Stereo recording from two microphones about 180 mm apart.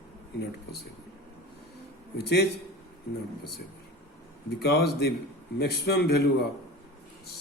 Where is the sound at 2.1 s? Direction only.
65° left (ahead or behind).